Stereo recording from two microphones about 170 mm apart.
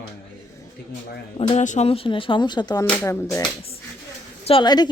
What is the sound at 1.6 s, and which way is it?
Speech, 45° left (ahead or behind).